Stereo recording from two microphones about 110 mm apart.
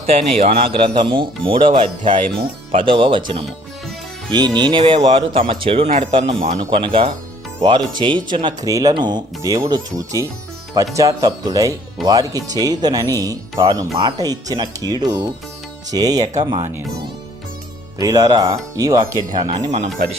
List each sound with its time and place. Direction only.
0.0 s speech: 65° right (ahead or behind); by 4.9 s 45° right (ahead or behind)
4.9 s speech: 70° right (ahead or behind); by 16.6 s 45° right (ahead or behind)
18.0 s speech: 35° right (ahead or behind)